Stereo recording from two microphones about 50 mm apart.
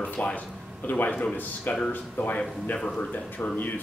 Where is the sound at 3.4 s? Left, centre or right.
Left.